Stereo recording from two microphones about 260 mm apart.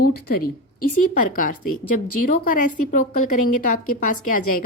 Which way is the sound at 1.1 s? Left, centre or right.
Left.